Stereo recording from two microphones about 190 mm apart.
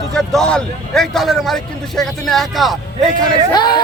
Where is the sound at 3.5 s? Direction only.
25° left (ahead or behind).